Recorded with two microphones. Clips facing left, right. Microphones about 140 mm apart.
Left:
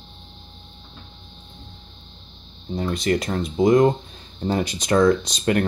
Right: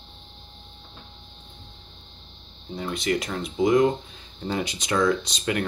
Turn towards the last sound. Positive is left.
turn(degrees=45)  # may be behind; listen again after turning